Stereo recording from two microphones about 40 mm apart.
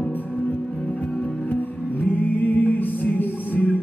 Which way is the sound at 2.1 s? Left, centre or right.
Left.